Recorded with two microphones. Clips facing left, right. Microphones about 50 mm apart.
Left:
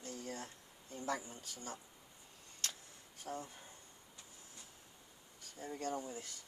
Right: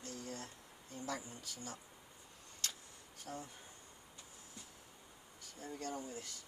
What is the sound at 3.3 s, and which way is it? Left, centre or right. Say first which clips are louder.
Speech: left 3 dB; centre.